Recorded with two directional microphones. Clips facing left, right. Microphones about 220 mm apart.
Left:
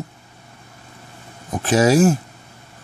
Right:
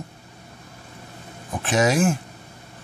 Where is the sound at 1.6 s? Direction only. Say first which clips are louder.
Left 5 dB; 40° left (ahead or behind).